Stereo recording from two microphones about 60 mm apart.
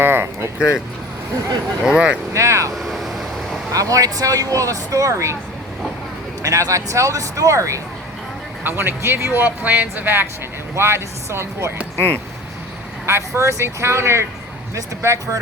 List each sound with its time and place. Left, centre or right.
0.0 s speech: right
1.8 s speech: centre
2.3 s speech: right
2.7 s vehicle: centre
3.7 s speech: right
6.4 s speech: right
8.6 s speech: right
10.8 s speech: right
11.8 s speech: right
13.1 s speech: right